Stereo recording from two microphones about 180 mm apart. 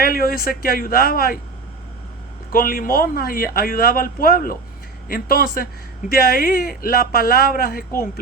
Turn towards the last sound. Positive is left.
turn(degrees=55)  # may be behind; listen again after turning